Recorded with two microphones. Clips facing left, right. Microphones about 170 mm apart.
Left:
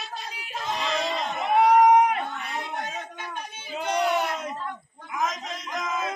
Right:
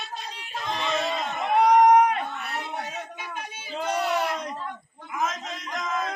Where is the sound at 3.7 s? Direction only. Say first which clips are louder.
Left 1 dB; 5° right (ahead or behind).